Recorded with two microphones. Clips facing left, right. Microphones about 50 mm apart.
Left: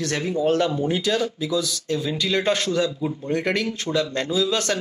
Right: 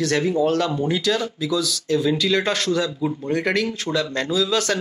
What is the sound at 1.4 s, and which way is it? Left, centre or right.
Speech, centre.